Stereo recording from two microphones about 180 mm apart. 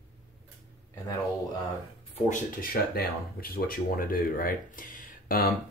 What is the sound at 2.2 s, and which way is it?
Speech, 55° left (ahead or behind).